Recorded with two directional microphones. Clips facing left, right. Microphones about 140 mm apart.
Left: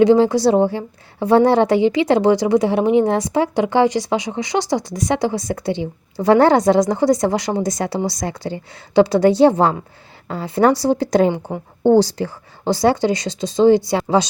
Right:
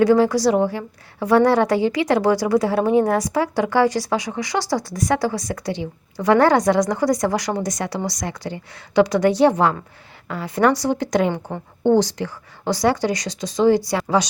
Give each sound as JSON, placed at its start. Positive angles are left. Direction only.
{"t": 0.0, "sound": "a woman's voice", "side_deg": 25}
{"t": 11.3, "sound": "a woman's voice", "side_deg": 10}
{"t": 11.8, "sound": "a woman's voice", "side_deg": 35}